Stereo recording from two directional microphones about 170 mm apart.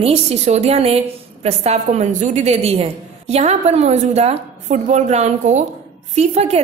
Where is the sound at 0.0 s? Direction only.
40° right (ahead or behind).